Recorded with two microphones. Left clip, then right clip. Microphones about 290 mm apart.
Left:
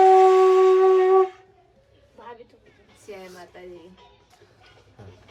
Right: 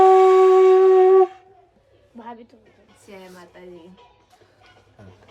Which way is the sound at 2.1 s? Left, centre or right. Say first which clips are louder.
Right 4 dB; right.